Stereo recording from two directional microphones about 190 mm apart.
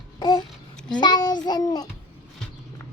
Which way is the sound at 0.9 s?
25° left (ahead or behind).